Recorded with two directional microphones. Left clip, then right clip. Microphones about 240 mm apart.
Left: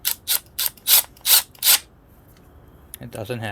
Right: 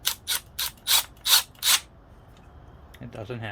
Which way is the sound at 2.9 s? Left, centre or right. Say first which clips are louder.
Left 7 dB; left.